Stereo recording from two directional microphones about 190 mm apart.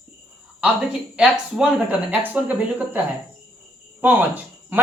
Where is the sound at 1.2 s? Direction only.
5° right (ahead or behind).